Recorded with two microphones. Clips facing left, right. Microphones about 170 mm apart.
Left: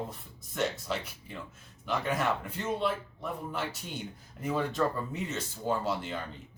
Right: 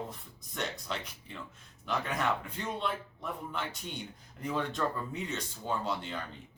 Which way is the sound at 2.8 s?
5° left (ahead or behind).